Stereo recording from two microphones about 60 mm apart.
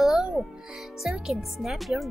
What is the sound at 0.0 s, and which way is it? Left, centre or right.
Music, centre.